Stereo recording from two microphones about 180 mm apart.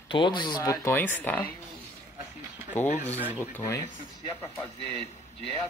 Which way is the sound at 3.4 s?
15° left (ahead or behind).